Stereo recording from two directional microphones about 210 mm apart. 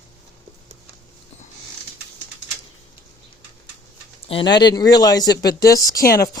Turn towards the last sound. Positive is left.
turn(degrees=45)  # may be behind; listen again after turning